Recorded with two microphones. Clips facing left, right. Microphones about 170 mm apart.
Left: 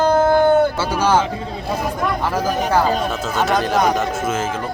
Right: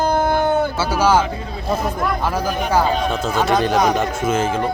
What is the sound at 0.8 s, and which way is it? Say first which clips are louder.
Speech: right 1 dB; 10° right (ahead or behind).